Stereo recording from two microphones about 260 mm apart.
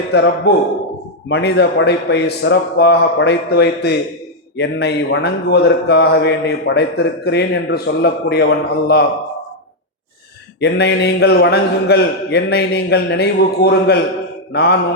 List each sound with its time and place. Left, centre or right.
0.1 s a man's voice: left
10.6 s a man's voice: left